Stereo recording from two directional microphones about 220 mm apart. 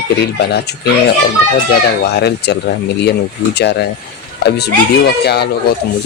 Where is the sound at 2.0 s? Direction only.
50° left (ahead or behind).